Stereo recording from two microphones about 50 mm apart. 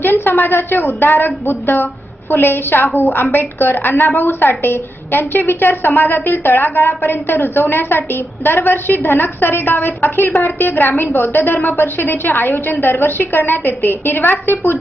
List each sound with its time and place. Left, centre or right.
0.0 s a woman's voice: left
2.3 s a woman's voice: left